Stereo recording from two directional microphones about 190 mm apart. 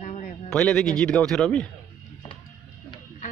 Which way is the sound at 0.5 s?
5° left (ahead or behind).